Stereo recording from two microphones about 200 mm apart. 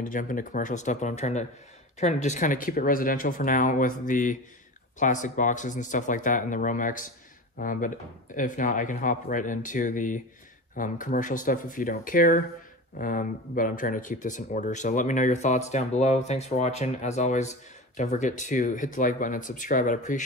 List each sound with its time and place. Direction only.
0.0 s speech: 40° left (ahead or behind)